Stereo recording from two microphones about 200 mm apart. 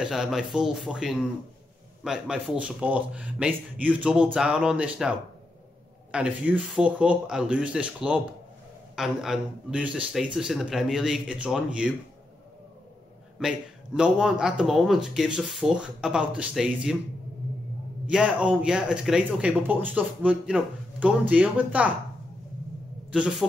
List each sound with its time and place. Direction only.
0.0 s a man's voice: centre (ahead or behind)
6.1 s a man's voice: 5° right (ahead or behind)
13.4 s a man's voice: 5° right (ahead or behind)
18.0 s a man's voice: 5° right (ahead or behind)
23.1 s a man's voice: 5° right (ahead or behind)